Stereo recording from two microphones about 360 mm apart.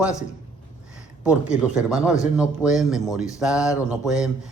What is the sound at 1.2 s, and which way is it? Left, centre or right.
Speech, centre.